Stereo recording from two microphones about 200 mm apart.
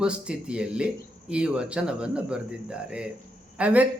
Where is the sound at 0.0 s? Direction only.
5° right (ahead or behind).